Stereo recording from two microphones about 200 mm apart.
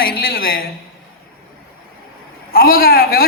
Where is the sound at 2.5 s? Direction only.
50° left (ahead or behind).